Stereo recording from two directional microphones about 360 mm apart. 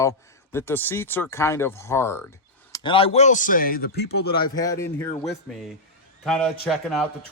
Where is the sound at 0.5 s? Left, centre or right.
Centre; by 4.4 s left.